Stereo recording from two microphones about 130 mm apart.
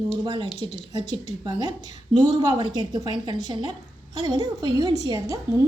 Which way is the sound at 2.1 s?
35° right (ahead or behind).